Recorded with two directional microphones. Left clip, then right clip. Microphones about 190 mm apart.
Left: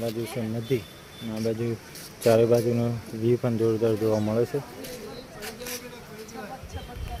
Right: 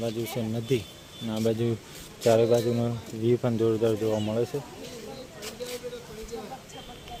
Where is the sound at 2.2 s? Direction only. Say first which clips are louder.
Left 1 dB; 5° left (ahead or behind).